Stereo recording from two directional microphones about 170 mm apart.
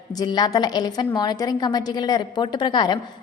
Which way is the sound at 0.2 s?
25° left (ahead or behind).